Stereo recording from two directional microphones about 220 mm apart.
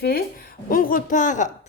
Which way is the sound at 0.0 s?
45° left (ahead or behind).